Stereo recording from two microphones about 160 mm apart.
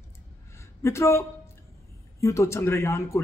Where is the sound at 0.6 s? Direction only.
15° left (ahead or behind).